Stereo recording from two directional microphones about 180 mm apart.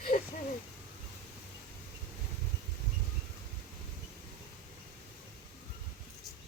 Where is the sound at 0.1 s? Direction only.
50° left (ahead or behind).